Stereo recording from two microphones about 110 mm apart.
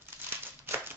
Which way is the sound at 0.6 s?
20° right (ahead or behind).